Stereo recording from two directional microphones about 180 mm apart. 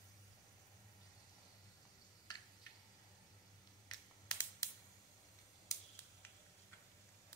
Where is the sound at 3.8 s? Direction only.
25° left (ahead or behind).